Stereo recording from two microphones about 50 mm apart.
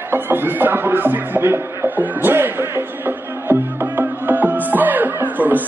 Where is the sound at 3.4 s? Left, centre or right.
Right.